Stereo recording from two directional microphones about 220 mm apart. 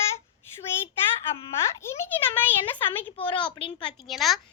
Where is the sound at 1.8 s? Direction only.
10° left (ahead or behind).